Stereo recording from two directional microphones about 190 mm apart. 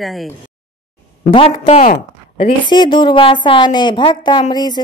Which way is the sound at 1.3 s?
25° left (ahead or behind).